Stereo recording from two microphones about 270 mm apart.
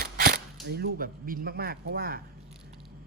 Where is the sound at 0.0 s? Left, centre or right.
Right.